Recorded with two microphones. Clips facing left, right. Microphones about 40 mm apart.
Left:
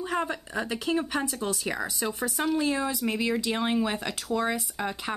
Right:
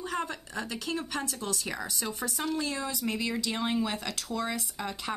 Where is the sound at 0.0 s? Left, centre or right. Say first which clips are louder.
Left 4 dB; centre.